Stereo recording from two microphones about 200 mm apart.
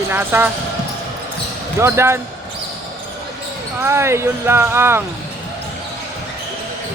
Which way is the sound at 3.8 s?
15° right (ahead or behind).